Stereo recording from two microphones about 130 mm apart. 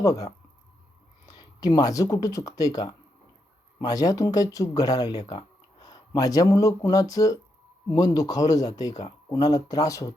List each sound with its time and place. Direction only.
0.0 s speech: 25° left (ahead or behind)